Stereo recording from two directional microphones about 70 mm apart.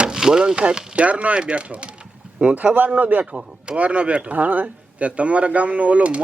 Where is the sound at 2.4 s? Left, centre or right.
Right.